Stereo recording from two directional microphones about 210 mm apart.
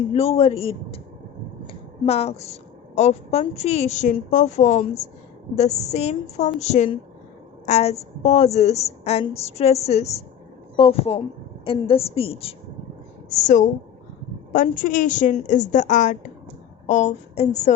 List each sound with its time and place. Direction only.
0.1 s a woman's voice: 30° left (ahead or behind)